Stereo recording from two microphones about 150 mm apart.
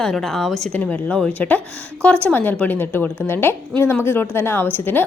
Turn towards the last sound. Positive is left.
turn(degrees=15)  # may be behind; listen again after turning